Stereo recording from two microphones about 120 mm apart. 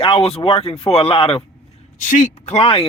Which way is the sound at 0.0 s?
55° left (ahead or behind).